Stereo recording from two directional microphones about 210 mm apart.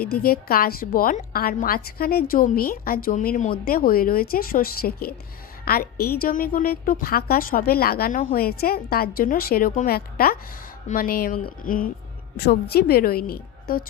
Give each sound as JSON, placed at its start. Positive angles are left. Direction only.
{"t": 0.0, "sound": "a woman's voice", "side_deg": 45}